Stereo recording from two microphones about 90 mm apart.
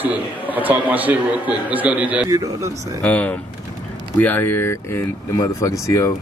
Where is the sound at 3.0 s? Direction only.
15° left (ahead or behind).